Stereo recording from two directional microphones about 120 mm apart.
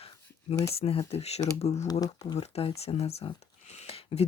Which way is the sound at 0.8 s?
55° left (ahead or behind).